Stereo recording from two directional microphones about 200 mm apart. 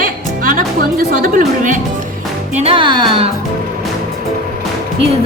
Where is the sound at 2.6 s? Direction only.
25° right (ahead or behind).